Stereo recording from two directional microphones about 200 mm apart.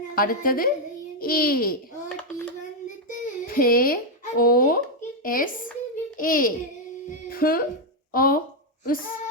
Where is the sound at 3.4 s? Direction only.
45° left (ahead or behind).